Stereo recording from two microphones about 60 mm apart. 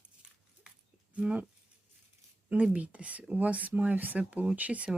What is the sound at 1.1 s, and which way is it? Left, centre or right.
Speech, right.